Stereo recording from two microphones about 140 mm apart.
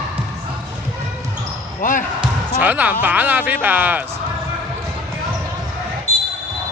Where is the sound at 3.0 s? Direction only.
10° right (ahead or behind).